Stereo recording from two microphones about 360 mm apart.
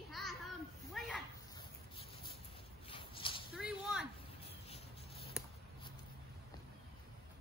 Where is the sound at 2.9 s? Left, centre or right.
Centre.